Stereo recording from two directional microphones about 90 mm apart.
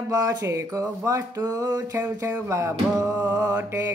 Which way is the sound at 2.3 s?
30° right (ahead or behind).